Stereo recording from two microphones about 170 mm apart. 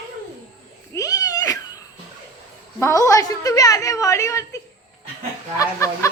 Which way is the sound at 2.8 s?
15° left (ahead or behind).